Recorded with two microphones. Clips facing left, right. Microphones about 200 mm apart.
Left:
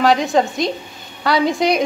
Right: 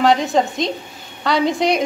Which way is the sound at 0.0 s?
Centre (ahead or behind).